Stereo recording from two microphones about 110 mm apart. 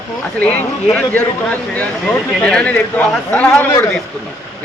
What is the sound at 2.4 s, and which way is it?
Speech, 10° left (ahead or behind).